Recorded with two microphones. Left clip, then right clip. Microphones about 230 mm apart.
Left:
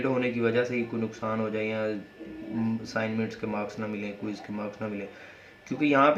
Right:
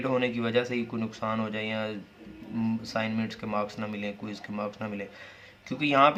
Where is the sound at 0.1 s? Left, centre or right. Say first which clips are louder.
Right 2 dB; right.